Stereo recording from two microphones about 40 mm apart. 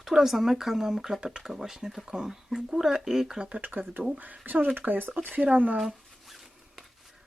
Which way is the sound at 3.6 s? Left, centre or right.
Right.